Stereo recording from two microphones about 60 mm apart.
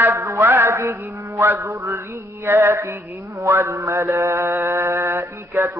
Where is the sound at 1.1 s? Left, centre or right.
Right.